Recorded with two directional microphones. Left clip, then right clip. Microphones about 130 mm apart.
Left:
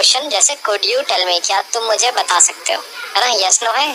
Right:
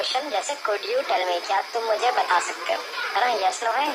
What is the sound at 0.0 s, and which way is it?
A woman's voice, 45° left (ahead or behind).